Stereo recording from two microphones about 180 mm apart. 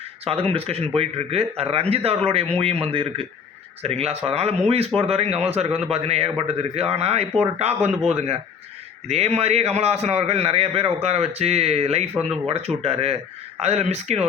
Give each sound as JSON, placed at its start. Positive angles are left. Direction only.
{"t": 0.3, "sound": "speech", "side_deg": -30}